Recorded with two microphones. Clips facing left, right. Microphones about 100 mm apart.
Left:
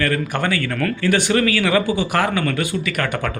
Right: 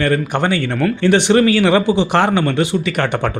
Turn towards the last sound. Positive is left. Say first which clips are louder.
# right 5 dB
turn(degrees=-25)  # may be behind; listen again after turning